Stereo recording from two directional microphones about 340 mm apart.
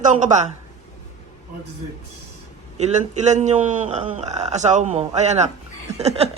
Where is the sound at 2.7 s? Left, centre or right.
Centre.